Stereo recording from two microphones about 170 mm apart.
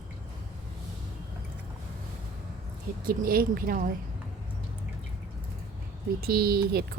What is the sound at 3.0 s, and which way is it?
Speech, 60° right (ahead or behind).